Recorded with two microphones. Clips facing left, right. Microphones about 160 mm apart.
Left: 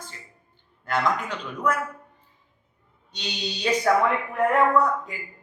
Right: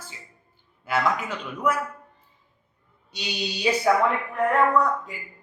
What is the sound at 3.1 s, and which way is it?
Speech, 10° right (ahead or behind).